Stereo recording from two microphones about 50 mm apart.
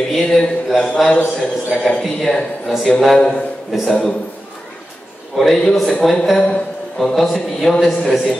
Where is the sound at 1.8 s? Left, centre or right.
Centre.